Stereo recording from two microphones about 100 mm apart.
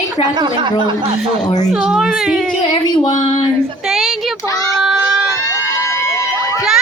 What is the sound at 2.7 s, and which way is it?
Speech, 90° left.